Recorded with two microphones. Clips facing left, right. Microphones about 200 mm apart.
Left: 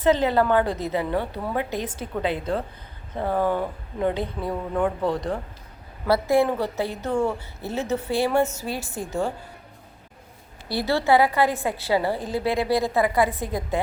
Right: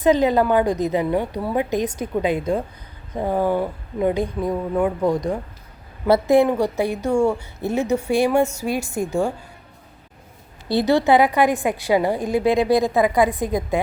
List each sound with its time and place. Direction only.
0.0 s a woman's voice: 15° right (ahead or behind)
10.7 s a woman's voice: 20° right (ahead or behind)